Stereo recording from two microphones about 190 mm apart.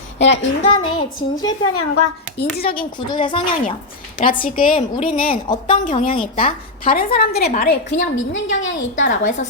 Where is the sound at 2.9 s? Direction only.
25° left (ahead or behind).